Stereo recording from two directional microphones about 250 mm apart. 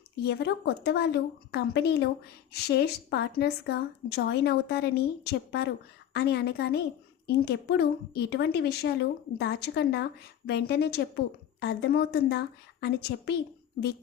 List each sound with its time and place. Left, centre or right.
0.3 s a woman's voice: left